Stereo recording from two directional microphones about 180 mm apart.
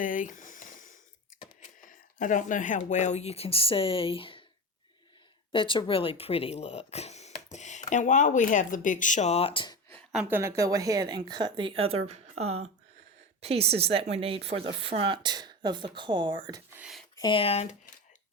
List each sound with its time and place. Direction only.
0.0 s a sound: 50° left (ahead or behind)
1.6 s speech: 45° left (ahead or behind); by 4.4 s 30° left (ahead or behind)
5.5 s speech: 30° left (ahead or behind)
10.1 s a woman's voice: 5° right (ahead or behind); by 12.2 s 35° right (ahead or behind)
13.4 s speech: 35° right (ahead or behind)
16.7 s a sound: 5° right (ahead or behind)
17.2 s speech: 25° left (ahead or behind)